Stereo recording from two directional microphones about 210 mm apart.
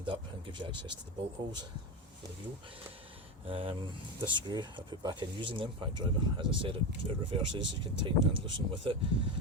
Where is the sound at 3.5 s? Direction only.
25° right (ahead or behind).